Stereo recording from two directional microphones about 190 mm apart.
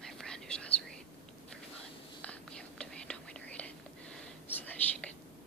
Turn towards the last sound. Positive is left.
turn(degrees=10)  # may be behind; listen again after turning